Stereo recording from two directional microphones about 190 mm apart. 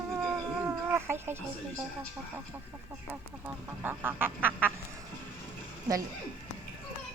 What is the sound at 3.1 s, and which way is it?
Speech, 10° right (ahead or behind).